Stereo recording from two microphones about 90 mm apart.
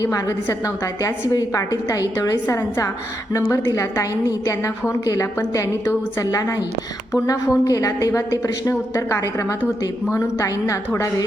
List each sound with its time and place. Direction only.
0.0 s a woman's voice: 35° left (ahead or behind)